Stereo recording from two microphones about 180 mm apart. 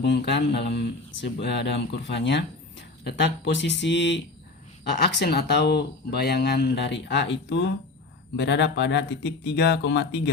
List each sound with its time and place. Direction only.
0.0 s speech: 70° left (ahead or behind)
4.9 s speech: 65° left (ahead or behind)